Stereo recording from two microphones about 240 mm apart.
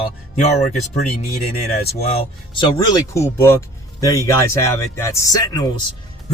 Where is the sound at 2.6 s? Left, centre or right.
Centre.